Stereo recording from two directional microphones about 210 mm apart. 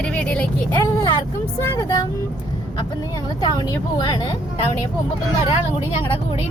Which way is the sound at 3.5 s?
20° left (ahead or behind).